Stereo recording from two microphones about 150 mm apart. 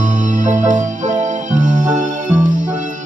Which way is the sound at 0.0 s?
55° right (ahead or behind).